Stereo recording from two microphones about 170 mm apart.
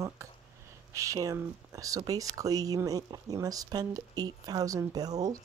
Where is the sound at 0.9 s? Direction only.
20° right (ahead or behind).